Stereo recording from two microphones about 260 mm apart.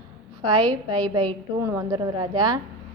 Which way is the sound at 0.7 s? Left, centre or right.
Centre.